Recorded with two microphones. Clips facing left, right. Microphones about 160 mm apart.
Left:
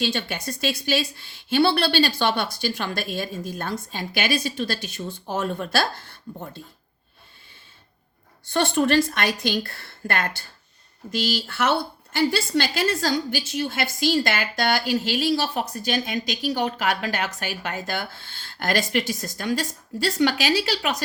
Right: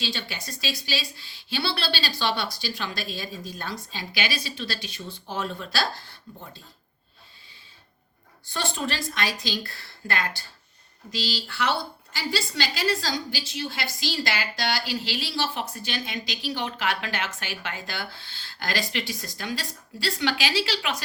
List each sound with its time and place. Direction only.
0.0 s a woman's voice: 50° left (ahead or behind)
8.5 s a woman's voice: 60° left (ahead or behind)